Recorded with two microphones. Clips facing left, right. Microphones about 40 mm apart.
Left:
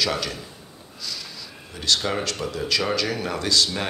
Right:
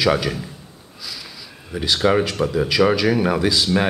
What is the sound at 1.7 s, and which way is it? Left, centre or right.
Speech, centre.